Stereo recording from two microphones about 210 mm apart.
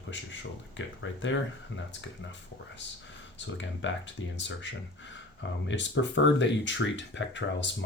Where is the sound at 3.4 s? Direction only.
60° left (ahead or behind).